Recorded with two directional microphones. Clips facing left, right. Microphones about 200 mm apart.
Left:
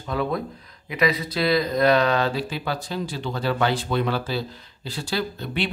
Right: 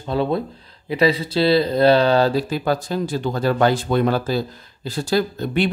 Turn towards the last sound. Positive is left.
turn(degrees=-45)  # may be behind; listen again after turning